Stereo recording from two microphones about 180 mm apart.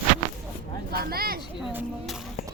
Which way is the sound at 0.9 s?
60° right (ahead or behind).